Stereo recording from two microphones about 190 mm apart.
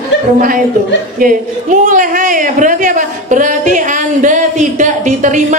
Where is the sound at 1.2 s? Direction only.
45° right (ahead or behind).